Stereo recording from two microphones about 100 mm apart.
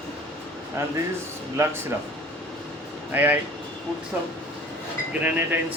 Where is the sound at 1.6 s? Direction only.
30° right (ahead or behind).